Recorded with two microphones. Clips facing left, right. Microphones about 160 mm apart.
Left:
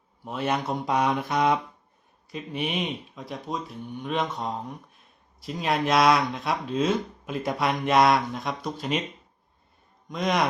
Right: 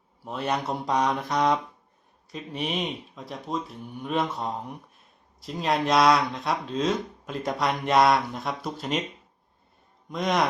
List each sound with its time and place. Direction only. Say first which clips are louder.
0.2 s speech: left 1 dB; centre (ahead or behind)
10.1 s speech: even; centre (ahead or behind)